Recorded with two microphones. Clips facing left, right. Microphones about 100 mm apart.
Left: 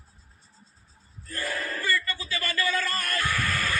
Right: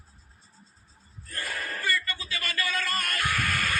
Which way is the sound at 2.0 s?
30° left (ahead or behind).